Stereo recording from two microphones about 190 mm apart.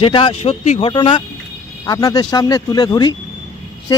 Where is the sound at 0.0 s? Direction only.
25° left (ahead or behind).